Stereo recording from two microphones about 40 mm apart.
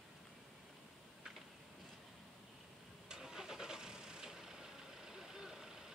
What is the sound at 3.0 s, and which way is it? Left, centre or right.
Vehicle, centre.